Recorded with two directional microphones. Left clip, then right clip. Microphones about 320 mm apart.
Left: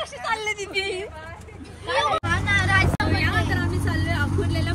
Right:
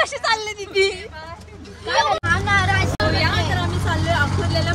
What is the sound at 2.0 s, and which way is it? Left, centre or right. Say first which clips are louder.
Vehicle: right 4 dB; right.